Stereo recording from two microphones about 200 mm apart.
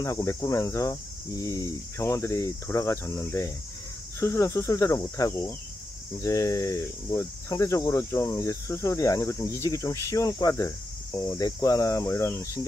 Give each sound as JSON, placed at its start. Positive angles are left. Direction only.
{"t": 0.0, "sound": "speech", "side_deg": 15}